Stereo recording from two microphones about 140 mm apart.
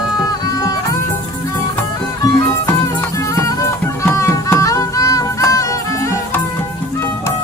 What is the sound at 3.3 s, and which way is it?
Music, 20° left (ahead or behind).